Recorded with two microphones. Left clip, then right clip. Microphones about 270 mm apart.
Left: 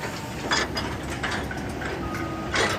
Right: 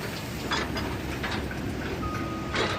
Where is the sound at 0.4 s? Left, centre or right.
Left.